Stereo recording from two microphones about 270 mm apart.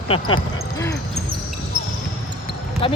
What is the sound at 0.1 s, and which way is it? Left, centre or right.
Speech, centre.